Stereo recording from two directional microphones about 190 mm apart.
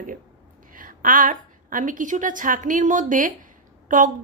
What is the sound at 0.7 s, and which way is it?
A woman's voice, 45° right (ahead or behind).